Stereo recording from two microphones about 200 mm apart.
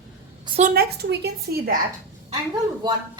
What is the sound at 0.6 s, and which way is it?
A woman's voice, 45° right (ahead or behind).